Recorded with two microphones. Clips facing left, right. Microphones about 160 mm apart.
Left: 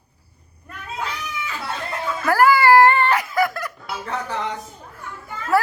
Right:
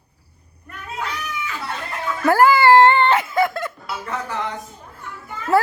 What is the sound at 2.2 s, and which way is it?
Music, 25° right (ahead or behind).